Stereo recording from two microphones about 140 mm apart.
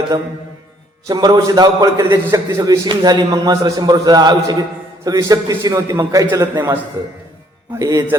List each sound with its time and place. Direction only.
1.0 s a man's voice: 30° right (ahead or behind)
2.0 s a man's voice: 20° right (ahead or behind)
2.6 s a man's voice: 30° right (ahead or behind)